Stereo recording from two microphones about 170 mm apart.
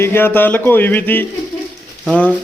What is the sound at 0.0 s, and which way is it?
A man's voice, 15° left (ahead or behind).